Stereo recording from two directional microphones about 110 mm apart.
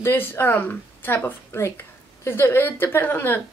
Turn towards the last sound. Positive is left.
turn(degrees=20)  # may be behind; listen again after turning